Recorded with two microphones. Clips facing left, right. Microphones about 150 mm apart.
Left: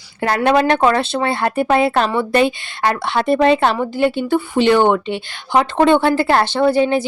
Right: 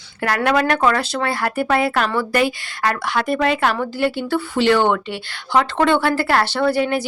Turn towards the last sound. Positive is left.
turn(degrees=20)  # may be behind; listen again after turning